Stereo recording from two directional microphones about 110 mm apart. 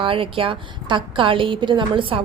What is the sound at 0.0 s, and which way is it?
A woman's voice, 55° right (ahead or behind).